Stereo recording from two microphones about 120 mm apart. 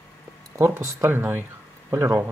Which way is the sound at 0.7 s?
20° right (ahead or behind).